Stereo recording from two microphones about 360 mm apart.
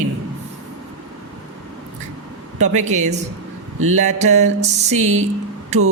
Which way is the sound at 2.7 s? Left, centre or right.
Centre.